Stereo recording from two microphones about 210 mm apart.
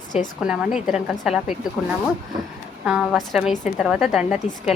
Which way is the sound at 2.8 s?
Centre (ahead or behind).